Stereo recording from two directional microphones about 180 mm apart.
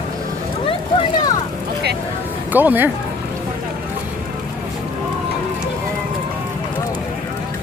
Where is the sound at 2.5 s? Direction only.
10° right (ahead or behind).